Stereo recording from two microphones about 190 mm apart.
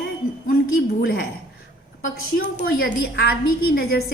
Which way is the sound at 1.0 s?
55° left (ahead or behind).